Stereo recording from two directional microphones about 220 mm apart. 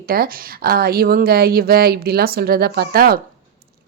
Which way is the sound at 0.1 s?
45° right (ahead or behind).